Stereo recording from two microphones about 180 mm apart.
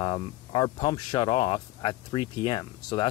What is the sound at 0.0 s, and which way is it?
Speech, 25° left (ahead or behind).